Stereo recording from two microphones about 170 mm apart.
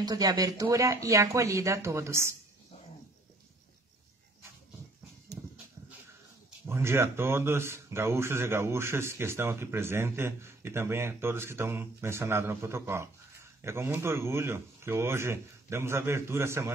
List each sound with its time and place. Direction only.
0.0 s speech: 25° right (ahead or behind)
6.6 s speech: 15° right (ahead or behind)